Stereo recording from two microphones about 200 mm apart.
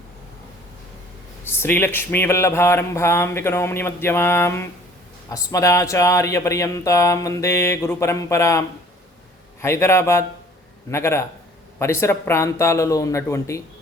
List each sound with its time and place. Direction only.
1.5 s speech: 10° left (ahead or behind)